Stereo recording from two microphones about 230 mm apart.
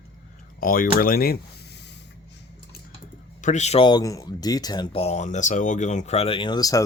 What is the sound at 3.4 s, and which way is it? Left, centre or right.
Speech, left.